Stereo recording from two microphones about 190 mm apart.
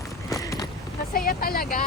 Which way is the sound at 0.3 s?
15° left (ahead or behind).